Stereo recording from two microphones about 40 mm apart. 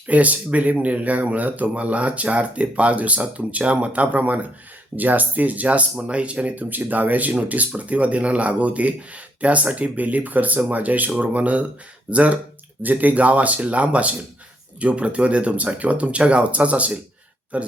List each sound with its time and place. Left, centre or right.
0.1 s speech: right
6.7 s speech: right